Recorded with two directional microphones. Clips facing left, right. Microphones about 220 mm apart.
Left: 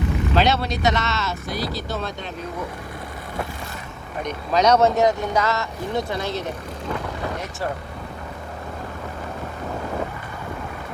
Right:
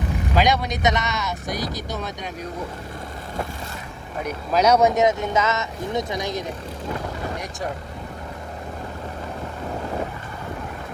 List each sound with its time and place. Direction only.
0.3 s speech: 15° right (ahead or behind)
4.2 s speech: 5° right (ahead or behind)